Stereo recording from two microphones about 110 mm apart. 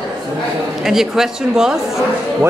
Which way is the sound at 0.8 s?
5° right (ahead or behind).